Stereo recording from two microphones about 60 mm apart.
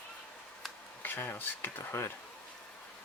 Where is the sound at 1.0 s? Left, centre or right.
Left.